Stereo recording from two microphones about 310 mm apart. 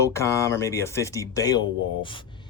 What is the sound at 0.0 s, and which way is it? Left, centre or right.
Speech, centre.